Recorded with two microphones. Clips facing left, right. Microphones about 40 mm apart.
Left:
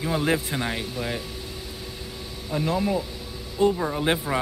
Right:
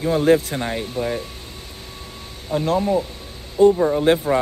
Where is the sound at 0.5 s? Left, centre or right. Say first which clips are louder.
Right 3 dB; centre.